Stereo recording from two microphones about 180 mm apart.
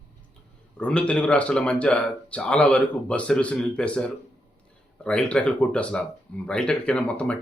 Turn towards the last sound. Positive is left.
turn(degrees=5)  # may be behind; listen again after turning